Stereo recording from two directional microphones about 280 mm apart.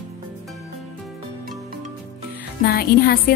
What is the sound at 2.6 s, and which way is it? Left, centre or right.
Speech, left.